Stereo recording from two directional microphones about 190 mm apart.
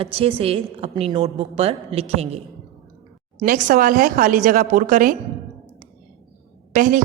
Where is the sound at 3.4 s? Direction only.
50° right (ahead or behind).